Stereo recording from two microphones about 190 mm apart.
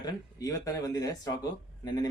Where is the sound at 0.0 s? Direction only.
20° left (ahead or behind).